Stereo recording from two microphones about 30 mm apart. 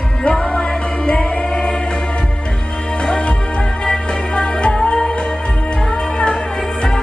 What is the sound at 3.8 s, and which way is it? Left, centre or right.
Music, left.